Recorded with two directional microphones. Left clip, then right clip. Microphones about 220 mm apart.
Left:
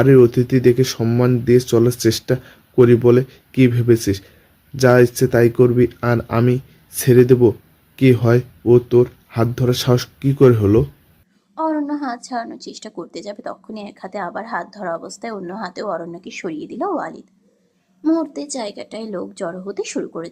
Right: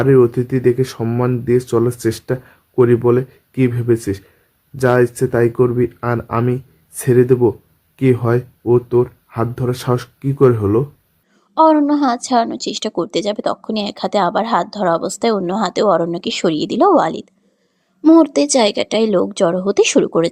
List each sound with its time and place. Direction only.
0.0 s speech: 10° left (ahead or behind)
11.5 s a woman's voice: 40° right (ahead or behind)